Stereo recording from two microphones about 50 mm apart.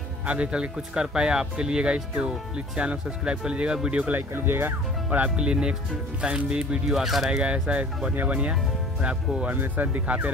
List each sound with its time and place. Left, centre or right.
0.3 s speech: right
4.1 s speech: right
5.4 s speech: centre
7.2 s speech: centre
9.6 s speech: right